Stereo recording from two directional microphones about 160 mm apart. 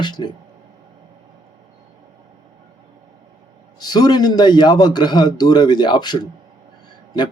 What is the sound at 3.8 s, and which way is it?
Speech, 25° left (ahead or behind).